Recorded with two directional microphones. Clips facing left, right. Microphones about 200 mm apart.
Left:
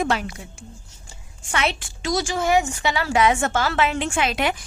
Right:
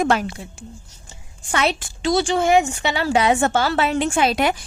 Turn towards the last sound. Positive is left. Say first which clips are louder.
# right 4 dB
turn(degrees=-40)  # may be behind; listen again after turning